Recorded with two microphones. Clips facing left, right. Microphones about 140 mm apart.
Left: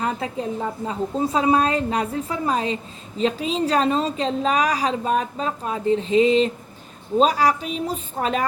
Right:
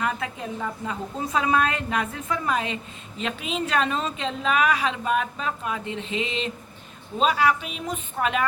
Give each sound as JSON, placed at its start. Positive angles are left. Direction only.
{"t": 0.0, "sound": "a woman's voice", "side_deg": 35}